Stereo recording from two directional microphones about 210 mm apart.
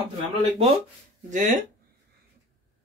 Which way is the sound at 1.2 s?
35° right (ahead or behind).